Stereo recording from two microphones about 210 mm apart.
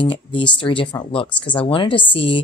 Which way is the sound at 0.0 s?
25° left (ahead or behind).